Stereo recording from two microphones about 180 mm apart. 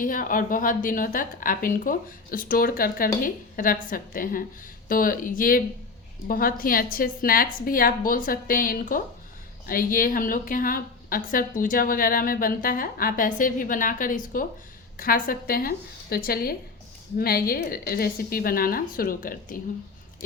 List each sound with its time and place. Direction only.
0.0 s a woman's voice: 50° left (ahead or behind)